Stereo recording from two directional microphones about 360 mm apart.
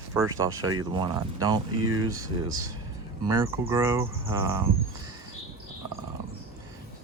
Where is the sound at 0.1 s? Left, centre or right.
Centre.